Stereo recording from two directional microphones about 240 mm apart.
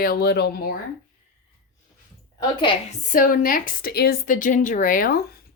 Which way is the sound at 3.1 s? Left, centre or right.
Left.